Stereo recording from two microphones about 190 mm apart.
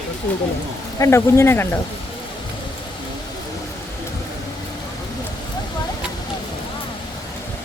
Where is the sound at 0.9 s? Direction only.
15° left (ahead or behind).